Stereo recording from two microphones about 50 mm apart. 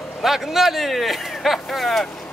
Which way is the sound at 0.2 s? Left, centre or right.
Centre.